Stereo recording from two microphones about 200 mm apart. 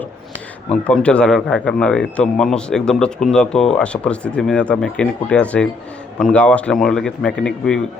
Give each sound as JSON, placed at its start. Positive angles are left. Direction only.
{"t": 0.7, "sound": "speech", "side_deg": 5}